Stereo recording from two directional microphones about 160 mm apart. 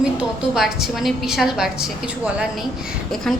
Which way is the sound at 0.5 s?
Centre (ahead or behind).